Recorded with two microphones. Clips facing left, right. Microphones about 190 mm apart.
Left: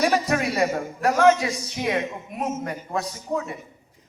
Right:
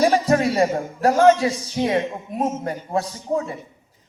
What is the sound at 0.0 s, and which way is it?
A man's voice, 30° right (ahead or behind).